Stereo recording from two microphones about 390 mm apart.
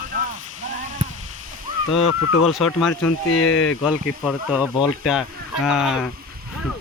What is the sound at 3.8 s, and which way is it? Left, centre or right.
Speech, centre.